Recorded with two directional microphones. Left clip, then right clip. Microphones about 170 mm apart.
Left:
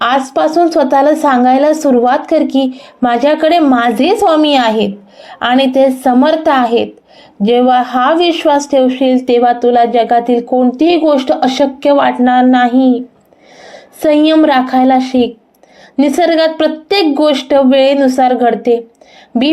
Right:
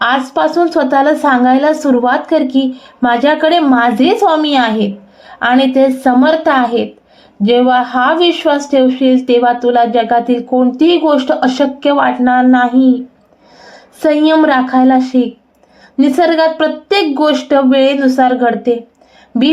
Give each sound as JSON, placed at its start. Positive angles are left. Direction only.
{"t": 0.0, "sound": "a woman's voice", "side_deg": 25}
{"t": 13.7, "sound": "a sound", "side_deg": 25}
{"t": 14.4, "sound": "a woman's voice", "side_deg": 25}